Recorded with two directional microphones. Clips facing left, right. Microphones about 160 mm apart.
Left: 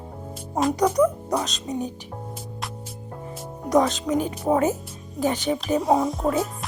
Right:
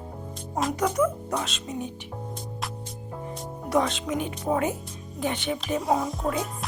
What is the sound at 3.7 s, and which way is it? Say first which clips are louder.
Speech: left 5 dB; 40° left (ahead or behind).